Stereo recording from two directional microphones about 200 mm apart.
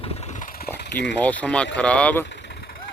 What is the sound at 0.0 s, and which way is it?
Vehicle, 30° left (ahead or behind).